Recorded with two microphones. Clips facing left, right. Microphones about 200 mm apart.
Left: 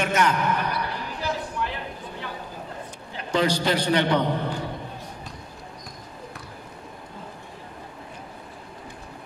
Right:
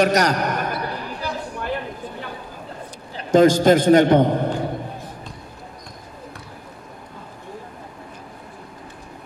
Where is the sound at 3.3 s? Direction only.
45° right (ahead or behind).